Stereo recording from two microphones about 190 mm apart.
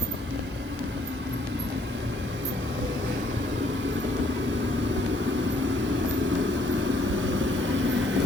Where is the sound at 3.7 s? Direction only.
70° right (ahead or behind).